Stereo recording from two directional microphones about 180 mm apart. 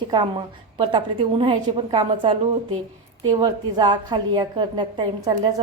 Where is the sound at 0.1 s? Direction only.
25° right (ahead or behind).